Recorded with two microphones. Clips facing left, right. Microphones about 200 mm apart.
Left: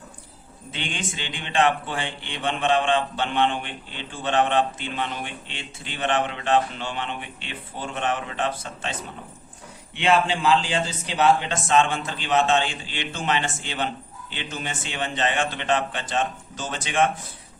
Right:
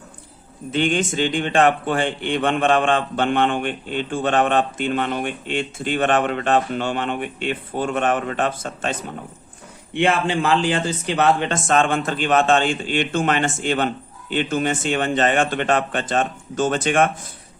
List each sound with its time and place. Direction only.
0.7 s a man's voice: 50° right (ahead or behind)